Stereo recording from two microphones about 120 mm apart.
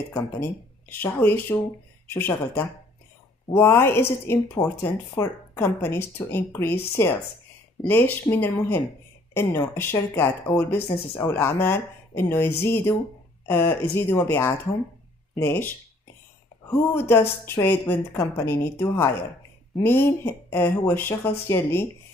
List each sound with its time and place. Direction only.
0.1 s speech: 15° left (ahead or behind)
17.1 s speech: 20° left (ahead or behind)